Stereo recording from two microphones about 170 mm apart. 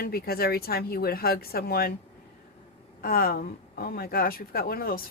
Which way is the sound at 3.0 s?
60° left (ahead or behind).